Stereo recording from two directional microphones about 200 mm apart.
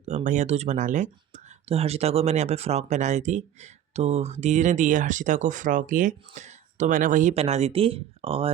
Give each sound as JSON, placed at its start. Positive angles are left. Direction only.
{"t": 0.3, "sound": "speech", "side_deg": -35}